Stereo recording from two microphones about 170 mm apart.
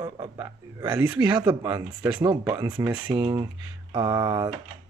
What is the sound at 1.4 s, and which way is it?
Speech, 25° right (ahead or behind).